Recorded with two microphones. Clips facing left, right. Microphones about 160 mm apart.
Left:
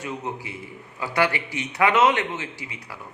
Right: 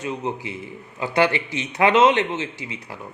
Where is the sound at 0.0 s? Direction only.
20° right (ahead or behind).